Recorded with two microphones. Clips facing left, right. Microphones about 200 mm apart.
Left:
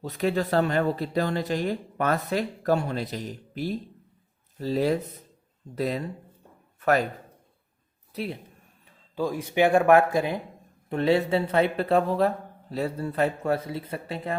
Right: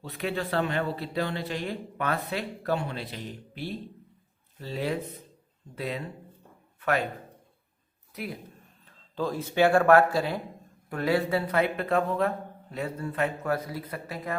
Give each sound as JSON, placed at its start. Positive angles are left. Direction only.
{"t": 0.0, "sound": "a man's voice", "side_deg": 40}
{"t": 8.1, "sound": "speech", "side_deg": 30}
{"t": 8.9, "sound": "a man's voice", "side_deg": 10}